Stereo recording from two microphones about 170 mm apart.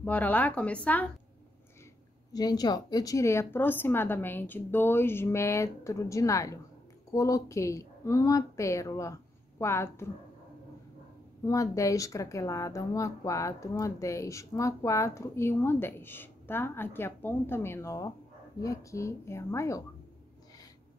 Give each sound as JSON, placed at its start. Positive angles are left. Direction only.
{"t": 0.0, "sound": "speech", "side_deg": 10}
{"t": 2.3, "sound": "speech", "side_deg": 25}
{"t": 11.4, "sound": "speech", "side_deg": 20}